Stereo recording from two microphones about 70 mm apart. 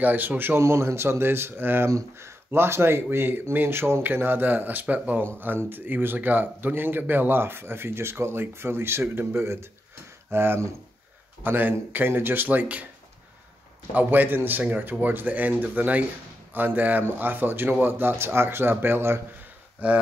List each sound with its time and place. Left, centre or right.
0.0 s speech: right
0.6 s speech: right
1.9 s speech: right
13.9 s speech: right